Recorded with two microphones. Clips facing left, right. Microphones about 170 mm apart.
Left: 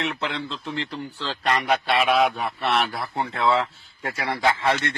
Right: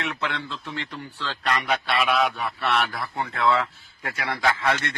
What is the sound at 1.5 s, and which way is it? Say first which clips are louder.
Speech: left 3 dB; 50° left (ahead or behind).